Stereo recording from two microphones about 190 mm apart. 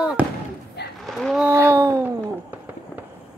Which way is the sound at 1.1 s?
Centre (ahead or behind).